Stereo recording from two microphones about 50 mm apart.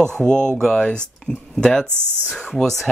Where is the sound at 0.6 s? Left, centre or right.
Centre.